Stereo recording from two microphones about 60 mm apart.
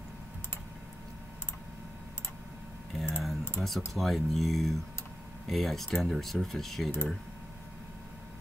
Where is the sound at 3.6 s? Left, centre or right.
Centre.